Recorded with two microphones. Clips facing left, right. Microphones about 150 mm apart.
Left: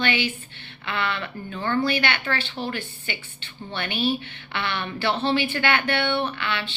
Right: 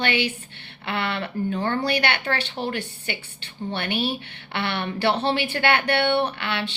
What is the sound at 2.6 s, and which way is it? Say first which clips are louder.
Speech: right 2 dB; 55° right (ahead or behind).